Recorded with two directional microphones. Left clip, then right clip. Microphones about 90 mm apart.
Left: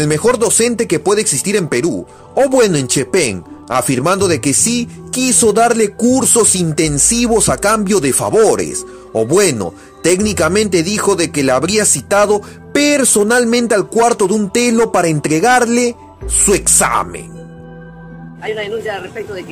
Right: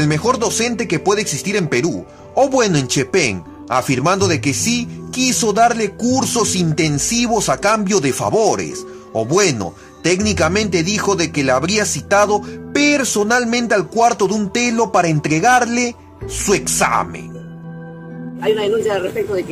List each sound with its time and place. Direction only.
0.0 s speech: 55° left (ahead or behind)
18.5 s speech: 5° right (ahead or behind)